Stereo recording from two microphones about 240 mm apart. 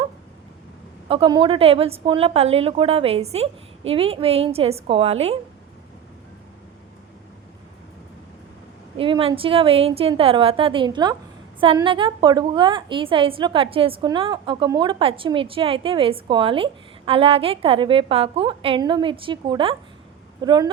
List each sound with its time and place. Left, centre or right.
1.0 s a woman's voice: right
9.0 s a woman's voice: right